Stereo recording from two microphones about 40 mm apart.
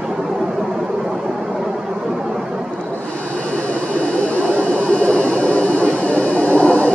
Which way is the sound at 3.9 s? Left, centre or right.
Left.